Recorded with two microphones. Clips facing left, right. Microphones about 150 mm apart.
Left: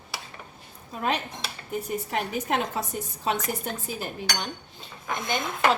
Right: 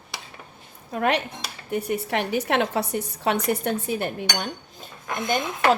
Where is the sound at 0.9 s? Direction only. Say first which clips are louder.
Right 5 dB; 70° right (ahead or behind).